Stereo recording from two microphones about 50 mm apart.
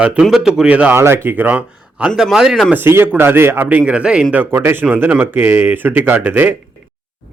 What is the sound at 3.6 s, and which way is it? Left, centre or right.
Speech, right.